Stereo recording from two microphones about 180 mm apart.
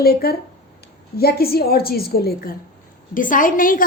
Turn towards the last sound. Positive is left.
turn(degrees=50)  # may be behind; listen again after turning